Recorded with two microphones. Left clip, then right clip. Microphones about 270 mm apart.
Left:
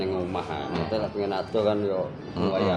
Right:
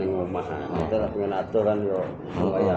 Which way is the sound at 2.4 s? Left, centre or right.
Left.